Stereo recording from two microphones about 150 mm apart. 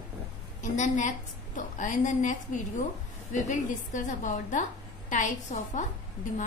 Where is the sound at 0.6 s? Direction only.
55° left (ahead or behind).